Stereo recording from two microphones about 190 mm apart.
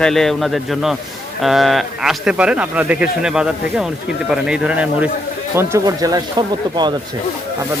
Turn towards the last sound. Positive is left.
turn(degrees=-20)  # may be behind; listen again after turning